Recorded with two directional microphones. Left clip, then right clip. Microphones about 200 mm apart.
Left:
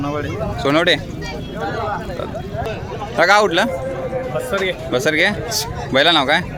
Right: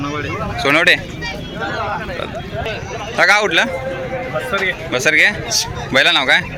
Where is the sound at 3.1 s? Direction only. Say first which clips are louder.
Right 1 dB; 15° left (ahead or behind).